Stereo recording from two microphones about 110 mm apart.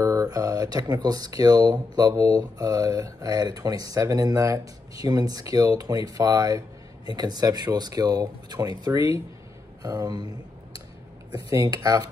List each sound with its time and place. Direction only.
0.0 s speech: 30° right (ahead or behind)
11.3 s speech: 35° right (ahead or behind)